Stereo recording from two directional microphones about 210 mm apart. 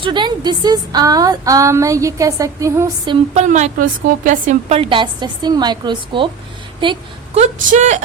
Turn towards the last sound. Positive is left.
turn(degrees=-35)  # may be behind; listen again after turning